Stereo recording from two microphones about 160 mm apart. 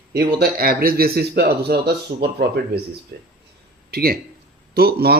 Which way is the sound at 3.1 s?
80° right.